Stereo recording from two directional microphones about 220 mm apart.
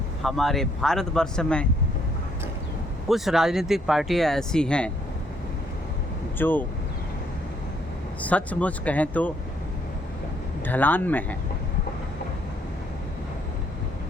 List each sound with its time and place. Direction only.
0.2 s speech: centre (ahead or behind)
3.1 s speech: centre (ahead or behind)
6.4 s speech: 10° left (ahead or behind)
8.2 s speech: 5° left (ahead or behind)
10.7 s speech: 10° left (ahead or behind)